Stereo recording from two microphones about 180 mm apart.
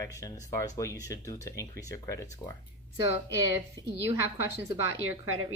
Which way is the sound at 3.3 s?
15° right (ahead or behind).